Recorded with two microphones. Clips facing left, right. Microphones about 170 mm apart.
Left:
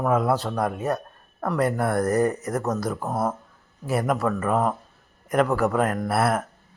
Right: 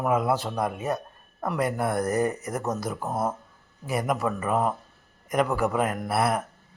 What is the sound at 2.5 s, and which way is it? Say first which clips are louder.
Speech: left 3 dB; 20° right (ahead or behind).